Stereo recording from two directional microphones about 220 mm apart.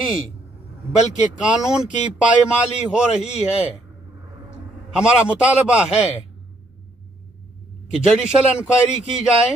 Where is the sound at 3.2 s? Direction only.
30° left (ahead or behind).